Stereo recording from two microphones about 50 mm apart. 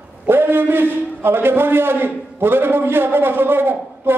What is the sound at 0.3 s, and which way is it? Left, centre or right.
A man's voice, right.